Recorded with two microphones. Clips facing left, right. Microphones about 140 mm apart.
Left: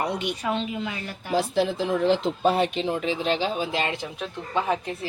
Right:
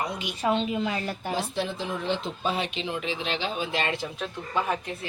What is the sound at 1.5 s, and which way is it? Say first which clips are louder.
Speech: left 7 dB; 90° left.